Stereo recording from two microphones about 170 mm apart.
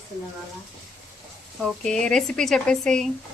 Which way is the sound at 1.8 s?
5° left (ahead or behind).